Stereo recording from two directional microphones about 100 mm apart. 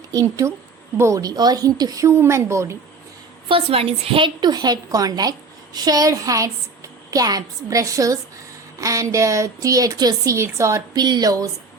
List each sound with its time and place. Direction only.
0.1 s a woman's voice: 35° right (ahead or behind)
3.5 s a woman's voice: 70° right (ahead or behind)
4.4 s a woman's voice: 45° right (ahead or behind)
10.3 s a woman's voice: 30° right (ahead or behind)
10.9 s speech: 45° right (ahead or behind)